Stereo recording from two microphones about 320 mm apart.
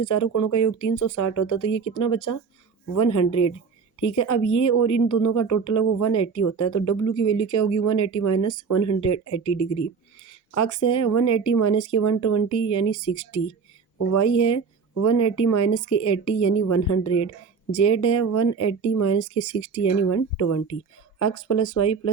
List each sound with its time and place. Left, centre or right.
0.0 s a woman's voice: left
10.5 s a woman's voice: left